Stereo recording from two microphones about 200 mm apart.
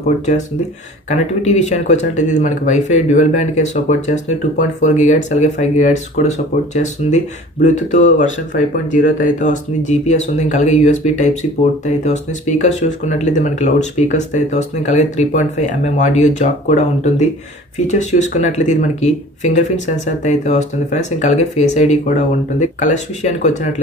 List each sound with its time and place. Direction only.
1.0 s speech: 35° left (ahead or behind)